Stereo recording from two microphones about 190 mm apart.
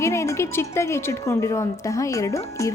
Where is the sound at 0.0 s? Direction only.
15° left (ahead or behind).